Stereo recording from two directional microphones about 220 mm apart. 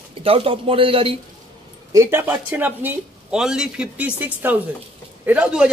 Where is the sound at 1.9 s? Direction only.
10° right (ahead or behind).